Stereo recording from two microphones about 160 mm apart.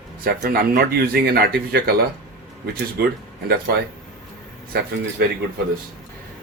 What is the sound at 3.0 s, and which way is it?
Speech, 80° right.